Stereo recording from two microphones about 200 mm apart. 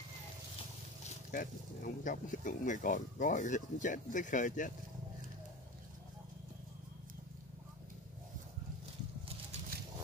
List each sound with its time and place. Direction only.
1.3 s speech: 40° left (ahead or behind)